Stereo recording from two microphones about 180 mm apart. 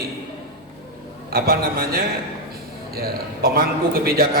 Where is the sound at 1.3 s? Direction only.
55° right (ahead or behind).